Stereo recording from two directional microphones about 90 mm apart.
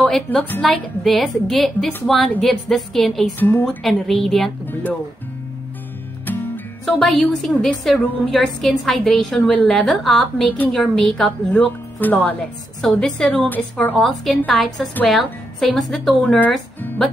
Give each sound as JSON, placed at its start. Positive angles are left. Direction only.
{"t": 0.0, "sound": "a woman's voice", "side_deg": 10}
{"t": 3.3, "sound": "a woman's voice", "side_deg": 20}
{"t": 3.6, "sound": "a woman's voice", "side_deg": 5}
{"t": 6.2, "sound": "music", "side_deg": 20}
{"t": 7.1, "sound": "a woman's voice", "side_deg": 5}
{"t": 11.5, "sound": "speech", "side_deg": 20}
{"t": 12.8, "sound": "a woman's voice", "side_deg": 5}
{"t": 13.5, "sound": "a woman's voice", "side_deg": 20}
{"t": 13.9, "sound": "a woman's voice", "side_deg": 0}